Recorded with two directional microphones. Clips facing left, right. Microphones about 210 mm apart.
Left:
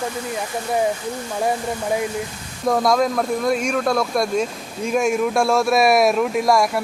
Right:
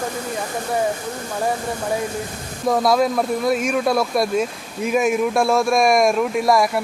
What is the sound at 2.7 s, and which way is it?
Speech, centre (ahead or behind).